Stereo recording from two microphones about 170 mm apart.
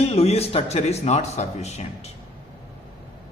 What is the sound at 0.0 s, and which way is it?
A man's voice, 35° left (ahead or behind).